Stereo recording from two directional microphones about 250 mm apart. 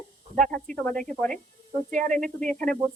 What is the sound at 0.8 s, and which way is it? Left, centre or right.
Speech, centre.